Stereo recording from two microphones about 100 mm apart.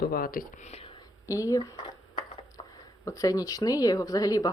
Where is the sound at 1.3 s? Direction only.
35° left (ahead or behind).